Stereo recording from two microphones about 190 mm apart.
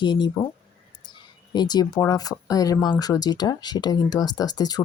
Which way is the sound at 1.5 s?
20° left (ahead or behind).